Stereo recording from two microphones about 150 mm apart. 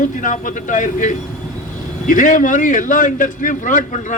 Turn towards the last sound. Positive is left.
turn(degrees=60)  # may be behind; listen again after turning